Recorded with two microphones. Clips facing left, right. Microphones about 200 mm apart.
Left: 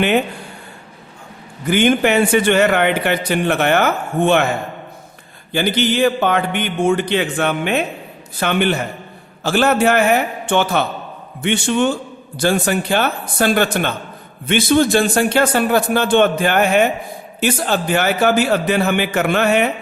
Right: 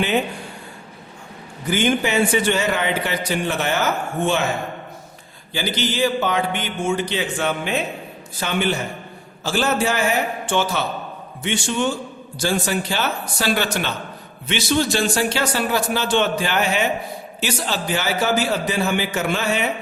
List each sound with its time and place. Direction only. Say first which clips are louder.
1.7 s a man's voice: left 5 dB; 60° left (ahead or behind)
5.5 s a man's voice: left 7 dB; 55° left (ahead or behind)